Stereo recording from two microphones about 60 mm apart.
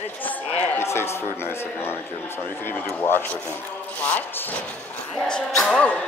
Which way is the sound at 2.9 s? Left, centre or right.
Left.